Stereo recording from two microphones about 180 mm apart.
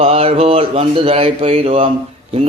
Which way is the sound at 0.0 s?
35° right (ahead or behind).